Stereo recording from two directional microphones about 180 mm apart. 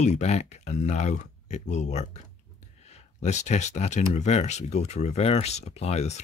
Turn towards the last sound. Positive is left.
turn(degrees=40)  # may be behind; listen again after turning